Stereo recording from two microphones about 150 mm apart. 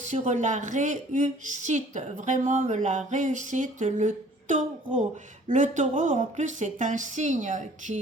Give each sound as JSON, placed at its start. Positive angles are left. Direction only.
{"t": 0.0, "sound": "a woman's voice", "side_deg": -55}